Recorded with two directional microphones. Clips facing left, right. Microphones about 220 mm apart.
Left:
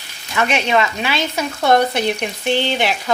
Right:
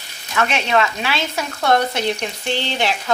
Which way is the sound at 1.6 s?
15° left (ahead or behind).